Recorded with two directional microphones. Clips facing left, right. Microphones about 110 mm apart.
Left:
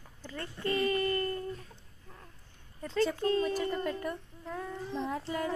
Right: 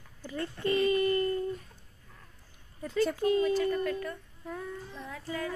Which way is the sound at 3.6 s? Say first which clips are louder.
Right 3 dB; 25° left (ahead or behind).